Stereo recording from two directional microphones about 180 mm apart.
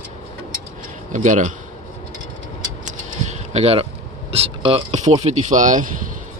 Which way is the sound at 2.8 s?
40° right (ahead or behind).